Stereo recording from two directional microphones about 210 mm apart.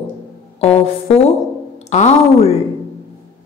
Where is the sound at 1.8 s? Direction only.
30° left (ahead or behind).